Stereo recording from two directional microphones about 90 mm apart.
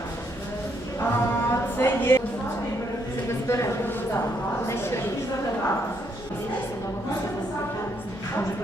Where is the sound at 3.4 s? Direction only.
35° left (ahead or behind).